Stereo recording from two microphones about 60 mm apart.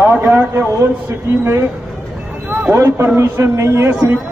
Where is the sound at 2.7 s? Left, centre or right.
Right.